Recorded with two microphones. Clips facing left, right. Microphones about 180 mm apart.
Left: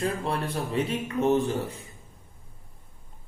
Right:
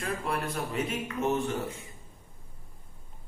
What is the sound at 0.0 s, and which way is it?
A man's voice, 30° left (ahead or behind).